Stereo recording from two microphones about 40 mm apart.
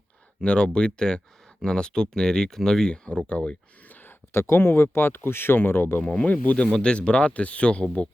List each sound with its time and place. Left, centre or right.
0.4 s speech: left
2.9 s speech: left
3.8 s a sound: left
4.3 s speech: left
6.3 s speech: left
6.7 s speech: left